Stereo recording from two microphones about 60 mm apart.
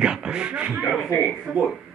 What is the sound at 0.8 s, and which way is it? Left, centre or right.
Speech, centre.